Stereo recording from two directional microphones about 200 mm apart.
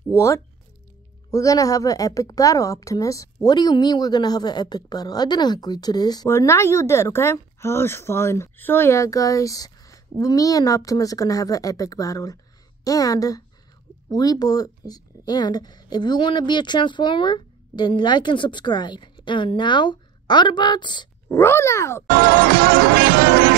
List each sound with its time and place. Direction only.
0.1 s a woman's voice: 15° left (ahead or behind)
22.1 s music: 45° right (ahead or behind)